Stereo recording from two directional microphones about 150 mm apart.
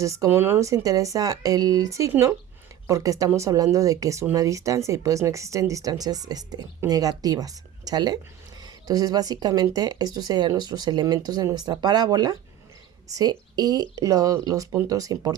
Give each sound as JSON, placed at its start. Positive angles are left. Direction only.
{"t": 0.0, "sound": "speech", "side_deg": -20}